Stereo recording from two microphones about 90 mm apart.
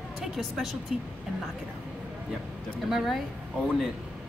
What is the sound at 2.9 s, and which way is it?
Speech, 5° right (ahead or behind).